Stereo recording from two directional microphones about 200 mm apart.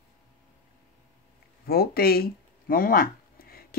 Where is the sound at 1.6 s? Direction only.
50° left (ahead or behind).